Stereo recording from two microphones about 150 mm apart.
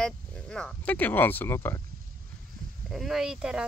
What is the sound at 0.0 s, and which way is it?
Speech, 5° left (ahead or behind).